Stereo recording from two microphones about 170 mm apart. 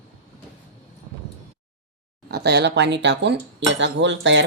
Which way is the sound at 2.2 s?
75° right (ahead or behind).